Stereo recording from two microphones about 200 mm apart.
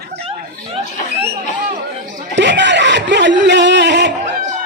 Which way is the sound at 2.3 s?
65° right (ahead or behind).